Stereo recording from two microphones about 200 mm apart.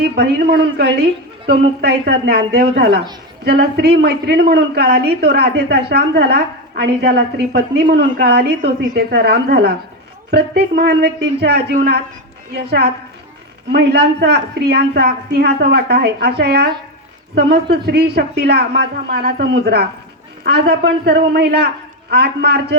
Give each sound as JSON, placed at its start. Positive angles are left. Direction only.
{"t": 0.0, "sound": "a man's voice", "side_deg": -55}